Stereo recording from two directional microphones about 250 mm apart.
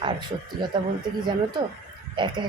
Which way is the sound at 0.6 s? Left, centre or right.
Centre.